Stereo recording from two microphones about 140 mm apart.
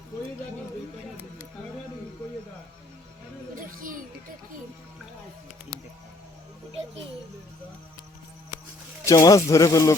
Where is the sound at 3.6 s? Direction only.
70° right (ahead or behind).